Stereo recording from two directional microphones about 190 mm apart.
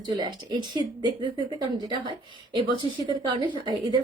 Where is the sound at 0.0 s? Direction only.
25° right (ahead or behind).